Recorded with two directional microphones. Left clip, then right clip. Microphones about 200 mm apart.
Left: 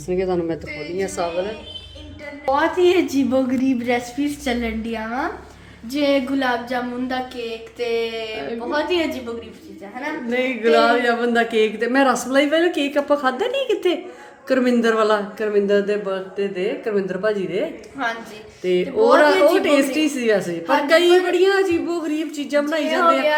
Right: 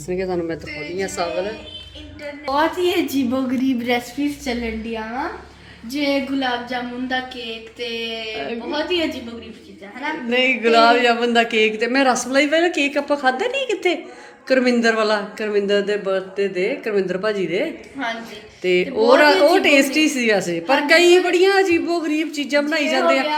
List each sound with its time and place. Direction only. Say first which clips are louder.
0.1 s speech: left 2 dB; 5° left (ahead or behind)
2.5 s a woman's voice: left 2 dB; 25° right (ahead or behind)
4.4 s speech: left 1 dB; 10° left (ahead or behind)
6.4 s a sound: left 1 dB; 20° left (ahead or behind)
7.8 s speech: left 4 dB; 15° left (ahead or behind)
10.2 s a man's voice: right 2 dB; centre (ahead or behind)